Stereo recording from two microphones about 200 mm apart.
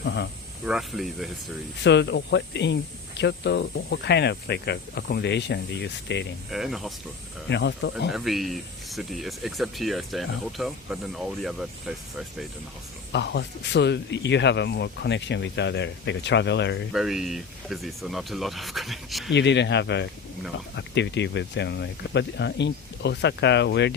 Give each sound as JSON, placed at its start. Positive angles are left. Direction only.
{"t": 0.0, "sound": "speech", "side_deg": 55}
{"t": 0.6, "sound": "speech", "side_deg": 0}
{"t": 1.8, "sound": "speech", "side_deg": 60}
{"t": 6.5, "sound": "speech", "side_deg": 0}
{"t": 7.5, "sound": "speech", "side_deg": 60}
{"t": 8.1, "sound": "speech", "side_deg": 0}
{"t": 13.1, "sound": "speech", "side_deg": 60}
{"t": 16.9, "sound": "speech", "side_deg": 0}
{"t": 19.3, "sound": "speech", "side_deg": 60}